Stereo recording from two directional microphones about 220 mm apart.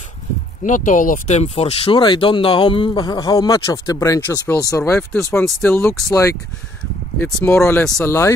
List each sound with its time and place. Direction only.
0.7 s speech: 35° left (ahead or behind); by 6.1 s 5° left (ahead or behind)
7.2 s speech: 5° left (ahead or behind)